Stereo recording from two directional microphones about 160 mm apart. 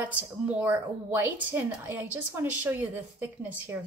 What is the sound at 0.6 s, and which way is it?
A woman's voice, 10° right (ahead or behind).